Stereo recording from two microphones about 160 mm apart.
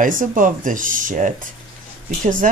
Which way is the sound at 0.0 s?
55° right (ahead or behind).